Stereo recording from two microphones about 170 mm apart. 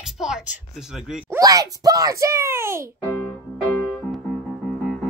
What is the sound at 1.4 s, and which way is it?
A child's voice, 20° right (ahead or behind).